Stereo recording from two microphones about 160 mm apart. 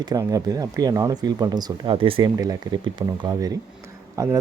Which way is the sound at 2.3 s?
20° right (ahead or behind).